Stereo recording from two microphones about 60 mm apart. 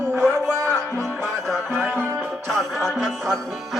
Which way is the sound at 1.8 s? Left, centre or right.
Right.